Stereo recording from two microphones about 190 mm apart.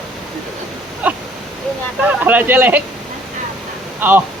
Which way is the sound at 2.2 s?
10° right (ahead or behind).